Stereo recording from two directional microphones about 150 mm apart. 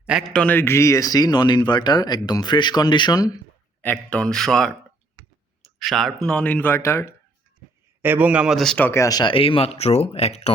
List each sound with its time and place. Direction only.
0.0 s a sound: 5° right (ahead or behind)
0.3 s speech: 10° left (ahead or behind)
3.8 s speech: 10° left (ahead or behind)
8.0 s speech: 10° right (ahead or behind); by 8.9 s 5° left (ahead or behind)
8.9 s speech: 20° left (ahead or behind); by 10.5 s 45° left (ahead or behind)